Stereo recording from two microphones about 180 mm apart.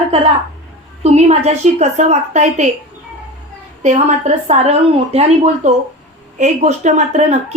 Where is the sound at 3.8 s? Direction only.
40° right (ahead or behind).